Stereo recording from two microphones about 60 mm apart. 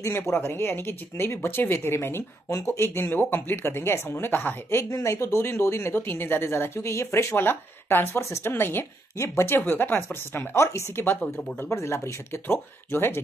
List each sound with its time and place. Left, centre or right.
0.3 s a woman's voice: left
5.0 s speech: left
9.6 s a woman's voice: left